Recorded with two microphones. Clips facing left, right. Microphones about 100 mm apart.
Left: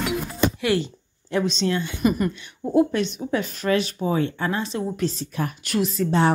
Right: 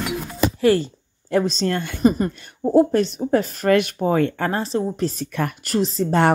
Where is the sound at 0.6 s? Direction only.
40° right (ahead or behind).